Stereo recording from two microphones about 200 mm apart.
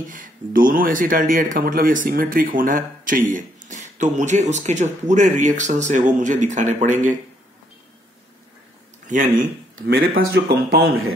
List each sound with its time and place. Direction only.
0.1 s speech: 45° right (ahead or behind)
9.0 s speech: 40° right (ahead or behind)